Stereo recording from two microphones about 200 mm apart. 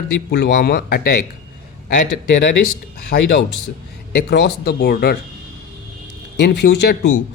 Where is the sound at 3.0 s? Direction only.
50° left (ahead or behind).